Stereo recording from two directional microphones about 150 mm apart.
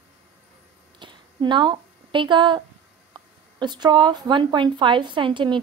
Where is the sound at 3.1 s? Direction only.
30° right (ahead or behind).